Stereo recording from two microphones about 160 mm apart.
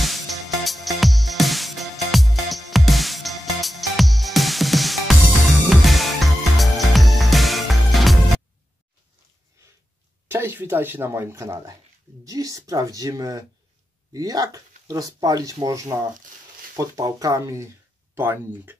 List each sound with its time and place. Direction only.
0.0 s music: centre (ahead or behind)
10.2 s speech: 15° right (ahead or behind)